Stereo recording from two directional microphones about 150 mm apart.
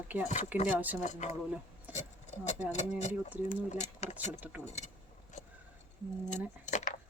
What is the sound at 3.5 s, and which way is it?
Speech, 50° left (ahead or behind).